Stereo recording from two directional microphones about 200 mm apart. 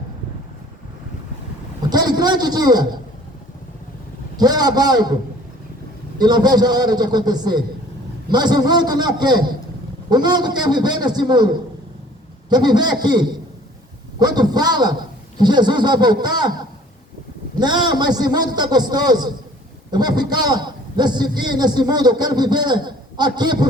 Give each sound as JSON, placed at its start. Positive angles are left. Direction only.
{"t": 1.9, "sound": "a man's voice", "side_deg": -20}
{"t": 4.4, "sound": "a man's voice", "side_deg": -20}
{"t": 6.1, "sound": "a man's voice", "side_deg": -20}
{"t": 12.5, "sound": "a man's voice", "side_deg": -20}
{"t": 17.6, "sound": "a man's voice", "side_deg": -20}